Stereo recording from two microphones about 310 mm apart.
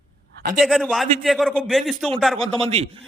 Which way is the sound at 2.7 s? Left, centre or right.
Centre.